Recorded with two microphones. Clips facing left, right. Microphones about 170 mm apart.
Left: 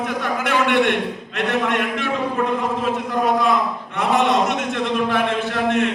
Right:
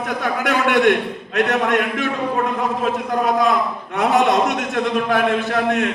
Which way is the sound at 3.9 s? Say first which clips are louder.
Right 2 dB; 40° right (ahead or behind).